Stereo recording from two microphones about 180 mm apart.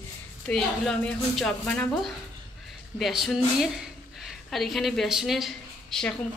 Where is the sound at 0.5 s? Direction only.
5° left (ahead or behind).